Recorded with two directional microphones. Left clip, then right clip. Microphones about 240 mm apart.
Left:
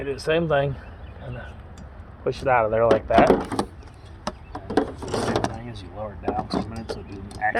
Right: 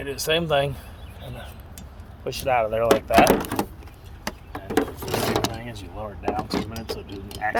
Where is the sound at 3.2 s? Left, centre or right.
Right.